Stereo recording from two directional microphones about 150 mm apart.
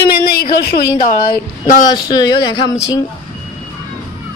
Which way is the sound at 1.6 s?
60° left (ahead or behind).